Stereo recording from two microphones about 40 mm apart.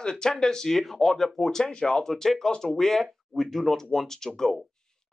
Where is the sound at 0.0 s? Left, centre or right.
Centre.